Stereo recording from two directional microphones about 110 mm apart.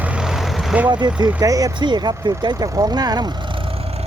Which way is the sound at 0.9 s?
40° right (ahead or behind).